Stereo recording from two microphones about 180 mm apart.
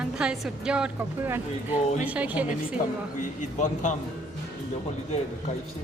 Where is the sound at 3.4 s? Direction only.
40° left (ahead or behind).